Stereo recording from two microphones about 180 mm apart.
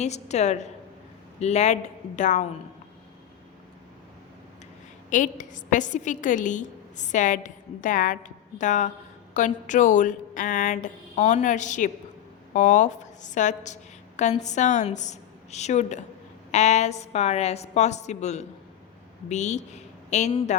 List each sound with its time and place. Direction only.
0.0 s a woman's voice: 40° left (ahead or behind)
5.1 s a woman's voice: 45° left (ahead or behind)